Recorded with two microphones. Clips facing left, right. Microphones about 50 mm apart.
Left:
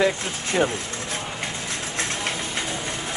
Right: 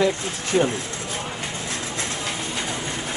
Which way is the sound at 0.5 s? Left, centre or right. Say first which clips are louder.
Right 2 dB; left.